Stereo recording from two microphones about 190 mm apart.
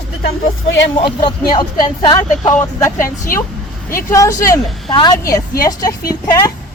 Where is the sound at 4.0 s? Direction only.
15° left (ahead or behind).